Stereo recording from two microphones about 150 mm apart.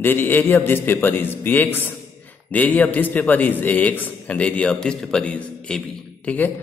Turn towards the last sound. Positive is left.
turn(degrees=10)  # may be behind; listen again after turning